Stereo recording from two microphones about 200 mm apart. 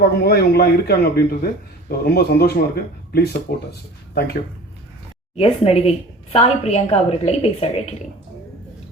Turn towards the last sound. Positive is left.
turn(degrees=30)  # may be behind; listen again after turning